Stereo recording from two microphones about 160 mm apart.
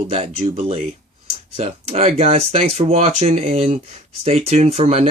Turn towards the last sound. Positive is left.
turn(degrees=-40)  # may be behind; listen again after turning